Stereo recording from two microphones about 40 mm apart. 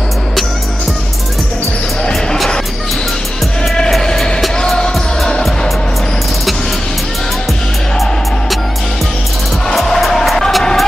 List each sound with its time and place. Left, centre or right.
4.6 s music: centre
9.7 s music: centre